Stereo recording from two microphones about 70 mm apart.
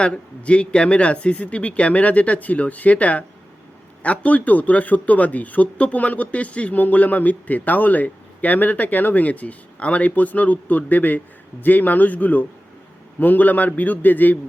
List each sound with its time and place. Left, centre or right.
0.0 s a man's voice: centre